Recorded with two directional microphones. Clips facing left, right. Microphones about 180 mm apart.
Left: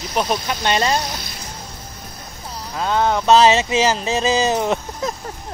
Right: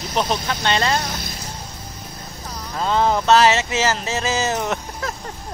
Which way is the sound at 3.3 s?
15° left (ahead or behind).